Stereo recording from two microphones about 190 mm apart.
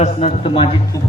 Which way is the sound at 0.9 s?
15° left (ahead or behind).